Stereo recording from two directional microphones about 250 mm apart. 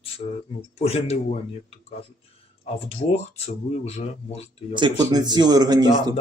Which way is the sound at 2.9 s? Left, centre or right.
Left.